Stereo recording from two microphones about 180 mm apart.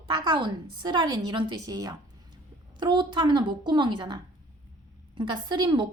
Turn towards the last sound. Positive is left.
turn(degrees=-25)  # may be behind; listen again after turning